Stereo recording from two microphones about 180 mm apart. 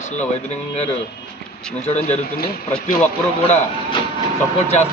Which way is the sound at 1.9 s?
35° left (ahead or behind).